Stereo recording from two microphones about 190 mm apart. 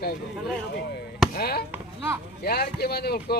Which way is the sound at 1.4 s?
55° left (ahead or behind).